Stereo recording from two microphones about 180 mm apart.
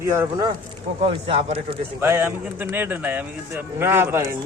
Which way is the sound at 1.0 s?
35° right (ahead or behind).